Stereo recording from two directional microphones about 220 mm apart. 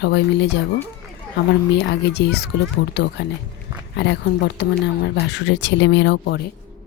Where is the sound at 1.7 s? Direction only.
50° left (ahead or behind).